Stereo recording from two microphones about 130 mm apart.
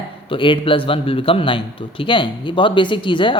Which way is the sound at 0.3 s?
40° left (ahead or behind).